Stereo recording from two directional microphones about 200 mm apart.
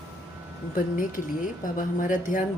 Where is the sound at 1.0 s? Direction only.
40° left (ahead or behind).